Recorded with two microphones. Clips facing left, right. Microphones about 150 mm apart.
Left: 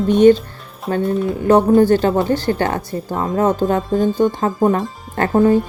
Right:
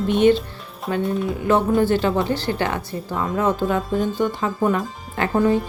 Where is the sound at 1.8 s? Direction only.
40° left (ahead or behind).